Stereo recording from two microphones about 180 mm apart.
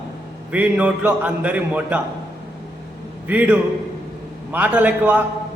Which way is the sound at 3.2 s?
10° right (ahead or behind).